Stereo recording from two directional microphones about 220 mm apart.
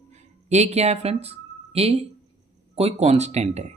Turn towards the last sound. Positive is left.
turn(degrees=-30)  # may be behind; listen again after turning